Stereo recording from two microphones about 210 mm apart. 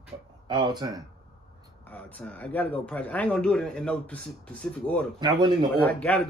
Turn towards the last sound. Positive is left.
turn(degrees=5)  # may be behind; listen again after turning